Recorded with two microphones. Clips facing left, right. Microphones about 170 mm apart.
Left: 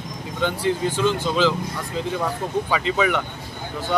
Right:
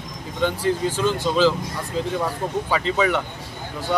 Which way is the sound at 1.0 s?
5° right (ahead or behind).